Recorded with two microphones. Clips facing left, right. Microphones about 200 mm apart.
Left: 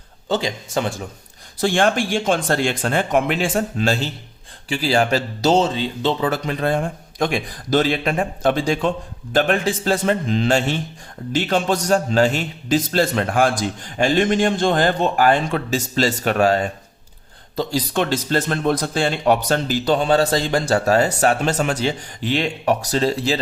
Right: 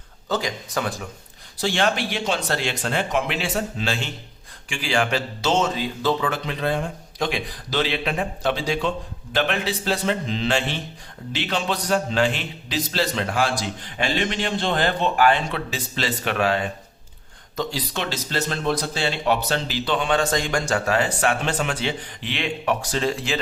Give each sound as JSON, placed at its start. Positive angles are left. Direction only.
{"t": 0.3, "sound": "speech", "side_deg": 25}
{"t": 1.5, "sound": "a man's voice", "side_deg": 50}